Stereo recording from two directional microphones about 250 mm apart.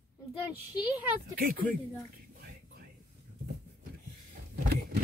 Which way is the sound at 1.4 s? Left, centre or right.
Right.